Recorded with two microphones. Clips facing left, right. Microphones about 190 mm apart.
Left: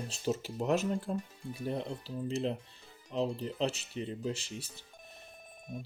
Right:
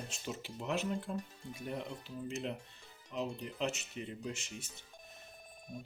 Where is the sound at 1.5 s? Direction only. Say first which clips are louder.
Left 5 dB; 30° left (ahead or behind).